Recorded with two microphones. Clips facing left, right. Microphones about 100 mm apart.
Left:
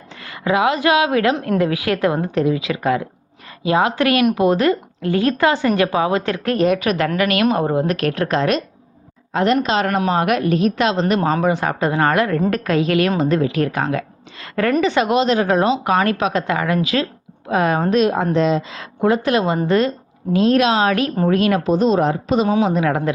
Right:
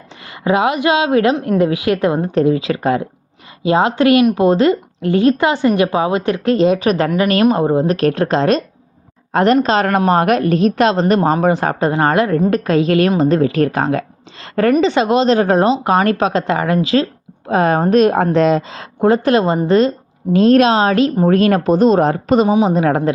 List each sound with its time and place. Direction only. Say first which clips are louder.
0.3 s a woman's voice: right 2 dB; 25° right (ahead or behind)
9.3 s a woman's voice: right 4 dB; 50° right (ahead or behind)
9.6 s a woman's voice: right 4 dB; 40° right (ahead or behind)
14.7 s speech: right 3 dB; 25° right (ahead or behind); by 18.6 s 55° right (ahead or behind)
19.0 s a woman's voice: right 4 dB; 35° right (ahead or behind)
20.3 s speech: right 4 dB; 40° right (ahead or behind)
21.2 s speech: right 2 dB; 40° right (ahead or behind)
22.4 s speech: right 3 dB; 15° right (ahead or behind)
22.7 s speech: right 4 dB; 35° right (ahead or behind)